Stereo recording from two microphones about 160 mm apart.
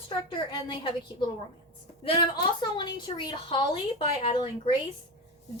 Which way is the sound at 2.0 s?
30° left (ahead or behind).